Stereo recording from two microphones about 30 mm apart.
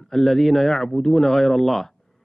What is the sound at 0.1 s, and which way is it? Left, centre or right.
Speech, centre.